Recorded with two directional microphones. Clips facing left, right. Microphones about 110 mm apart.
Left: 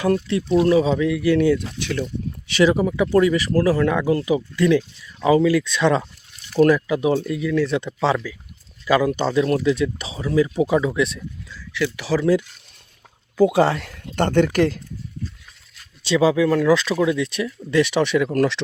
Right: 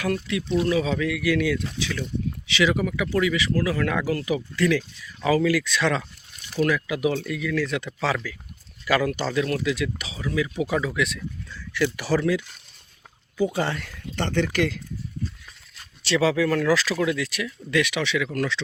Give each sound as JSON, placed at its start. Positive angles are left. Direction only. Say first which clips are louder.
{"t": 0.0, "sound": "speech", "louder": "left 6 dB", "side_deg": 30}
{"t": 2.5, "sound": "speech", "louder": "left 6 dB", "side_deg": 45}
{"t": 2.7, "sound": "speech", "louder": "left 6 dB", "side_deg": 30}
{"t": 3.1, "sound": "speech", "louder": "left 6 dB", "side_deg": 40}
{"t": 3.8, "sound": "speech", "louder": "left 5 dB", "side_deg": 25}
{"t": 6.6, "sound": "speech", "louder": "left 7 dB", "side_deg": 40}
{"t": 10.7, "sound": "speech", "louder": "left 5 dB", "side_deg": 25}
{"t": 11.5, "sound": "a sound", "louder": "left 1 dB", "side_deg": 0}
{"t": 11.9, "sound": "speech", "louder": "left 3 dB", "side_deg": 0}
{"t": 13.3, "sound": "speech", "louder": "left 8 dB", "side_deg": 85}
{"t": 14.2, "sound": "speech", "louder": "left 6 dB", "side_deg": 50}
{"t": 16.0, "sound": "speech", "louder": "left 4 dB", "side_deg": 15}
{"t": 18.0, "sound": "speech", "louder": "left 7 dB", "side_deg": 45}